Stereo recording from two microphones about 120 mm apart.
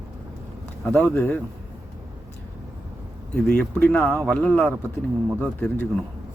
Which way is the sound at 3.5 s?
10° left (ahead or behind).